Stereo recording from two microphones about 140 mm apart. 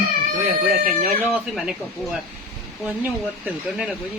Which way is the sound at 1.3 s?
5° right (ahead or behind).